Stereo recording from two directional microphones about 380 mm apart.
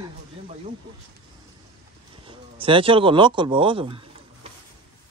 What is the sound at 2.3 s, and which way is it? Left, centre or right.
Speech, centre.